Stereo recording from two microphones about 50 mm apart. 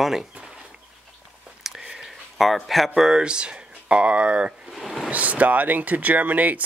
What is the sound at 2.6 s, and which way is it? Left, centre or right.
Speech, centre.